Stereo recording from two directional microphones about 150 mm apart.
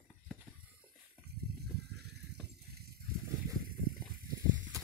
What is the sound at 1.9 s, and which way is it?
Water, 90° right.